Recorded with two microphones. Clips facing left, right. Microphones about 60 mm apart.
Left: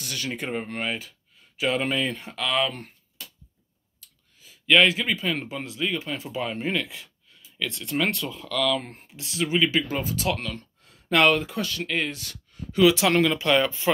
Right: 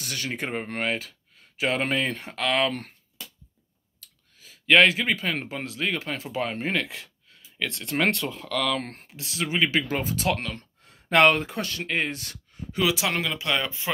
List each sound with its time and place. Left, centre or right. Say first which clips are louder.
0.0 s speech: even; right
1.6 s speech: even; right
4.6 s speech: right 1 dB; right
6.2 s speech: even; right
8.7 s speech: left 1 dB; right
9.0 s speech: left 1 dB; right
9.4 s speech: left 1 dB; right
12.8 s speech: left 7 dB; centre